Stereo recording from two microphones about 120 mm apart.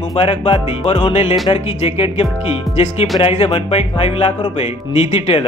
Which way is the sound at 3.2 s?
55° left (ahead or behind).